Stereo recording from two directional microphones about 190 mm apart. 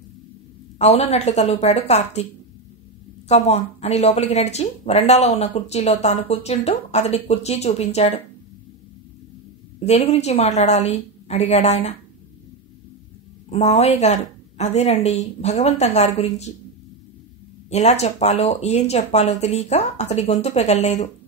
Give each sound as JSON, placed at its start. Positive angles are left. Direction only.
{"t": 0.7, "sound": "speech", "side_deg": 35}
{"t": 3.3, "sound": "speech", "side_deg": 35}
{"t": 9.8, "sound": "speech", "side_deg": 35}
{"t": 13.5, "sound": "speech", "side_deg": 35}
{"t": 17.6, "sound": "speech", "side_deg": 35}